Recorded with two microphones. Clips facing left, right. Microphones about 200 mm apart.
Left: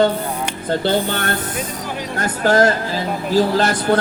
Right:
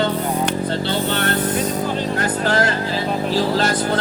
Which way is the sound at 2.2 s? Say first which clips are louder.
Left 7 dB; 45° left (ahead or behind).